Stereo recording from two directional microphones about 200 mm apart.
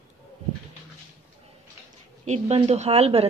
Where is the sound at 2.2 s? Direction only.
35° right (ahead or behind).